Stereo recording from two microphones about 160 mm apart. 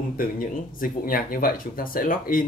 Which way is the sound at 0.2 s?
60° left (ahead or behind).